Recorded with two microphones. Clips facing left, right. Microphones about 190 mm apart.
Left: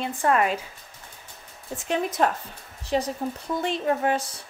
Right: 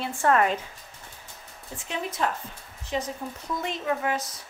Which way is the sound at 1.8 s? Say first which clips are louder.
Left 6 dB; 50° left (ahead or behind).